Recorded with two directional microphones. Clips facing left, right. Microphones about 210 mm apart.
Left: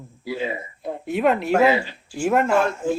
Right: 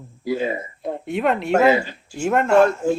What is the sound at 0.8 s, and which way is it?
Speech, centre (ahead or behind).